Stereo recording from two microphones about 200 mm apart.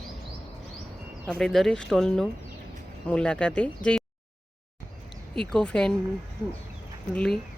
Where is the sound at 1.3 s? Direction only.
Centre (ahead or behind).